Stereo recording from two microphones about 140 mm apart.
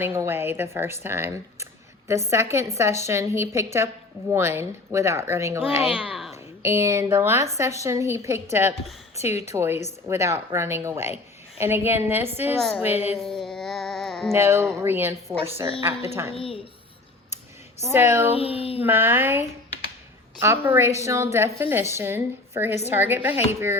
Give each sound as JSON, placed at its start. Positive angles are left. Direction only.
{"t": 0.0, "sound": "a woman's voice", "side_deg": -15}
{"t": 5.8, "sound": "speech", "side_deg": -5}
{"t": 6.3, "sound": "a woman's voice", "side_deg": -20}
{"t": 12.5, "sound": "a woman's voice", "side_deg": 0}
{"t": 12.8, "sound": "a woman's voice", "side_deg": -10}
{"t": 13.1, "sound": "a sound", "side_deg": 5}
{"t": 14.3, "sound": "a woman's voice", "side_deg": -15}
{"t": 16.3, "sound": "child singing", "side_deg": 40}
{"t": 17.8, "sound": "a woman's voice", "side_deg": -15}
{"t": 18.3, "sound": "child singing", "side_deg": 45}
{"t": 18.8, "sound": "a woman's voice", "side_deg": -15}